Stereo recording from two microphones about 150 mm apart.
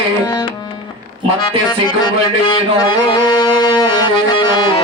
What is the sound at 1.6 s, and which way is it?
Music, 30° left (ahead or behind).